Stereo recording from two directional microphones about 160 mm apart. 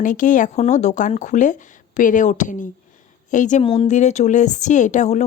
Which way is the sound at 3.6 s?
35° left (ahead or behind).